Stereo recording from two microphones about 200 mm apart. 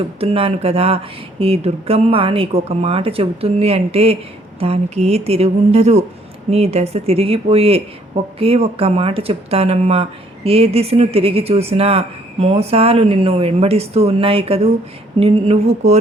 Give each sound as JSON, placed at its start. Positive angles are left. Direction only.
{"t": 0.2, "sound": "a woman's voice", "side_deg": -30}